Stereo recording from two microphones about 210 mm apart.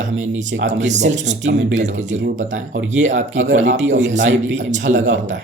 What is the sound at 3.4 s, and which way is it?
Speech, 35° right (ahead or behind).